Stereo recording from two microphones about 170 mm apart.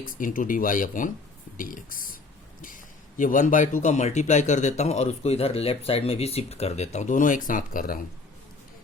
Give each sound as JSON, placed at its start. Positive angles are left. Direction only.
{"t": 0.0, "sound": "a man's voice", "side_deg": 50}